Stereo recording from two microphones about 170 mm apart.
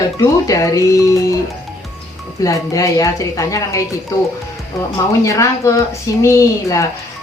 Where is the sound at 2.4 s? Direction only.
20° left (ahead or behind).